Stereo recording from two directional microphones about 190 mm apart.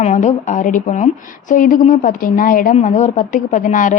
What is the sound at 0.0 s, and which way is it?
A woman's voice, 40° left (ahead or behind).